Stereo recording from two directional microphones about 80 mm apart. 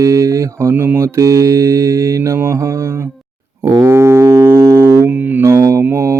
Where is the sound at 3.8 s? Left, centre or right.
Right.